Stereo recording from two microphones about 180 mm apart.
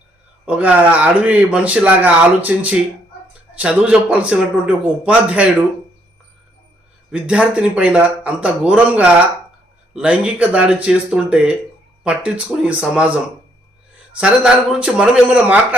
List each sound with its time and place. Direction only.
0.4 s speech: 5° right (ahead or behind)
7.1 s a man's voice: 5° right (ahead or behind)
14.2 s a man's voice: 5° right (ahead or behind)